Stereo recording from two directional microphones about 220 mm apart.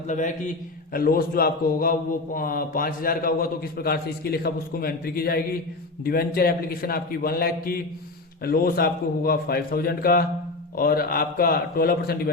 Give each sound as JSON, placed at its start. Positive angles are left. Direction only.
{"t": 0.1, "sound": "a man's voice", "side_deg": 35}